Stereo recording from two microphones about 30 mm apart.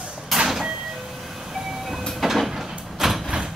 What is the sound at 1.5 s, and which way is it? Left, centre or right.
Vehicle, centre.